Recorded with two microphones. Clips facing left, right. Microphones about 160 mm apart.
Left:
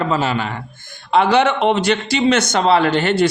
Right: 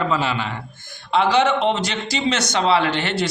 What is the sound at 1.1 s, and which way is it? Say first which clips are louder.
A man's voice: left 3 dB; 55° left (ahead or behind).